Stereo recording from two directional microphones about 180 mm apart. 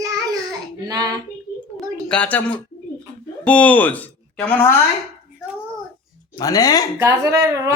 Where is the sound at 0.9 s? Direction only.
20° right (ahead or behind).